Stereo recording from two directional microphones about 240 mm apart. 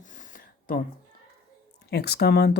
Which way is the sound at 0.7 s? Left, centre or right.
Left.